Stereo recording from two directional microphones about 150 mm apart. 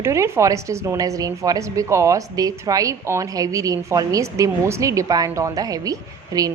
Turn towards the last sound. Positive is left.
turn(degrees=-25)  # may be behind; listen again after turning